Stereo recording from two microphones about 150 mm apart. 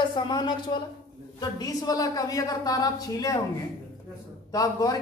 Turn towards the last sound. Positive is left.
turn(degrees=25)  # may be behind; listen again after turning